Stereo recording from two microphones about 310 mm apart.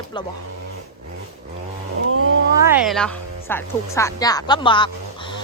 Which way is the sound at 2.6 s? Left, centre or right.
Centre.